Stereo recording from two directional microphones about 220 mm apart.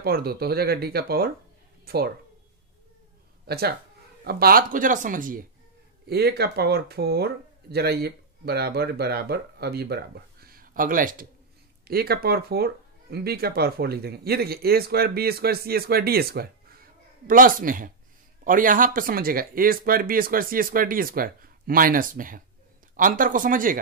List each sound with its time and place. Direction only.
0.0 s speech: 45° right (ahead or behind)
3.4 s speech: 45° right (ahead or behind)